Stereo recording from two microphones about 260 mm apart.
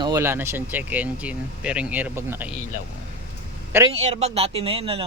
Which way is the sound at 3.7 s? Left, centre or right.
Centre.